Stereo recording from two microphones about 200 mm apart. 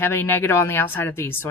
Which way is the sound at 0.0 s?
10° left (ahead or behind).